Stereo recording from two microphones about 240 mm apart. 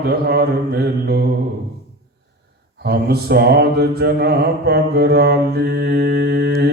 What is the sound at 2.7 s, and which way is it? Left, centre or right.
Mantra, right.